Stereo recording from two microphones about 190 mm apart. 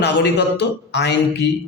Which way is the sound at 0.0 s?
60° left (ahead or behind).